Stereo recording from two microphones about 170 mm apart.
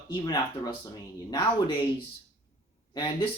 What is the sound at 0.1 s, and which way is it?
Speech, 25° left (ahead or behind).